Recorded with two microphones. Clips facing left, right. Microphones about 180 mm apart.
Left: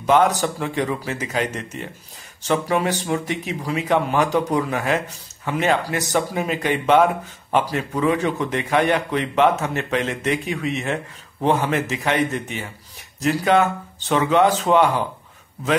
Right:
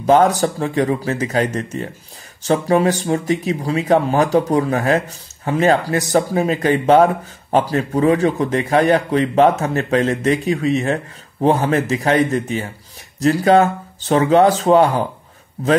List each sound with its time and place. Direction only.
0.0 s speech: 40° right (ahead or behind)